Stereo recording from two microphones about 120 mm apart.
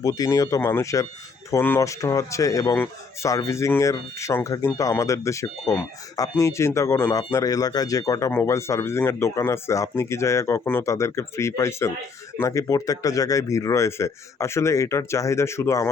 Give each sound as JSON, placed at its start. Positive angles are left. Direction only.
{"t": 0.0, "sound": "speech", "side_deg": 30}